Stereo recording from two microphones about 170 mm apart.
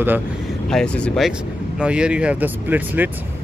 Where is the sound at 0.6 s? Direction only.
5° left (ahead or behind).